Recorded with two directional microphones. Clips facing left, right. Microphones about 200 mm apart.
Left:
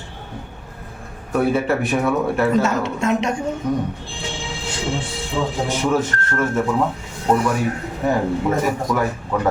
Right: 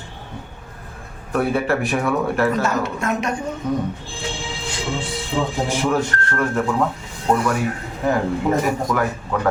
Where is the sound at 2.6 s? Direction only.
25° left (ahead or behind).